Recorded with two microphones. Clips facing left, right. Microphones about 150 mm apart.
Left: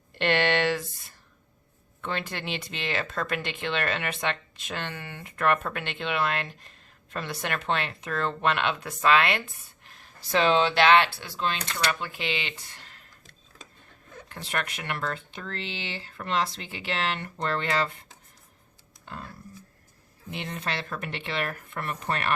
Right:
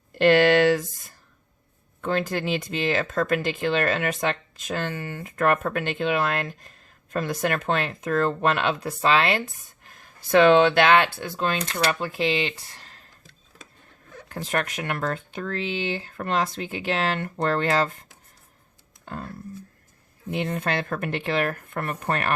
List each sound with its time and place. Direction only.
0.1 s a sound: 40° right (ahead or behind)
2.0 s speech: 40° right (ahead or behind)
9.8 s speech: 45° right (ahead or behind)
14.4 s speech: 45° right (ahead or behind)
19.0 s a sound: 45° right (ahead or behind)
20.3 s speech: 50° right (ahead or behind)